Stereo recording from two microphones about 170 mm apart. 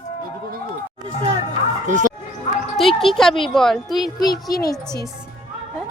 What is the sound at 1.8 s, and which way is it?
Speech, 50° right (ahead or behind).